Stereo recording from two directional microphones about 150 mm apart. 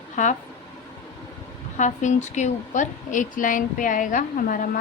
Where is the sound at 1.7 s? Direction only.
55° left (ahead or behind).